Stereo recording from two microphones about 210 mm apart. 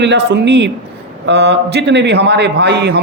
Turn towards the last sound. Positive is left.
turn(degrees=-55)  # may be behind; listen again after turning